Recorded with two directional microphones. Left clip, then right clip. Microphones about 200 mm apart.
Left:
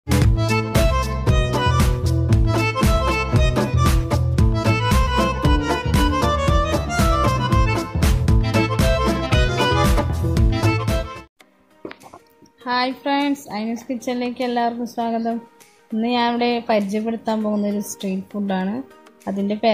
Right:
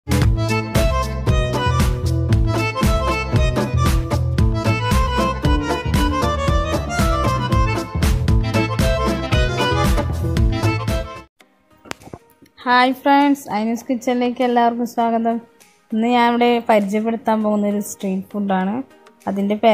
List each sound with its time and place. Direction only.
0.1 s music: centre (ahead or behind)
12.6 s a woman's voice: 25° right (ahead or behind)